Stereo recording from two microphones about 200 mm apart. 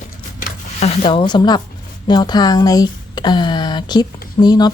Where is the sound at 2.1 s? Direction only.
20° left (ahead or behind).